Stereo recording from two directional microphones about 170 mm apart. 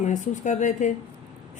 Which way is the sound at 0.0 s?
45° left (ahead or behind).